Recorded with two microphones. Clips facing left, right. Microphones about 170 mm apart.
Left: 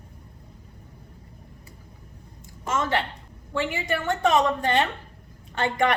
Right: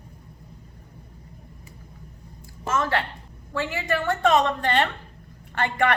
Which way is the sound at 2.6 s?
20° left (ahead or behind).